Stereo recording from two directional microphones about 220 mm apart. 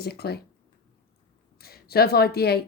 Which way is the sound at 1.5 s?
45° left (ahead or behind).